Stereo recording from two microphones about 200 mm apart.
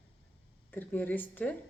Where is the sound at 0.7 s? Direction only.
10° left (ahead or behind).